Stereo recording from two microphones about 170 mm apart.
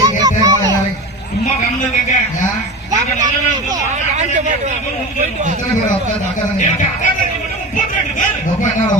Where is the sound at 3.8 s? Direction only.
45° right (ahead or behind).